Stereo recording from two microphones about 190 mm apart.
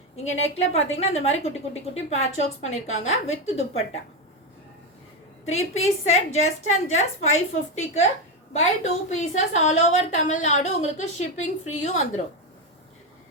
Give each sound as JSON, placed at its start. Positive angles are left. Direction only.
{"t": 0.3, "sound": "a woman's voice", "side_deg": 35}
{"t": 5.5, "sound": "a woman's voice", "side_deg": 35}